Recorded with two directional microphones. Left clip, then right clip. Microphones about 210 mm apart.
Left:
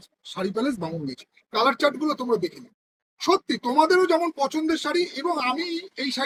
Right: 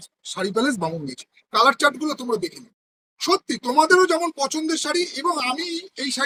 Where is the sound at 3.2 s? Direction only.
45° right (ahead or behind).